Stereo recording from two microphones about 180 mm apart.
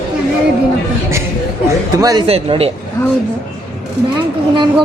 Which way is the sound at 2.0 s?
20° right (ahead or behind).